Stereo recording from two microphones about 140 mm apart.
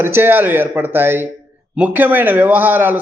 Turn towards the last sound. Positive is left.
turn(degrees=-15)  # may be behind; listen again after turning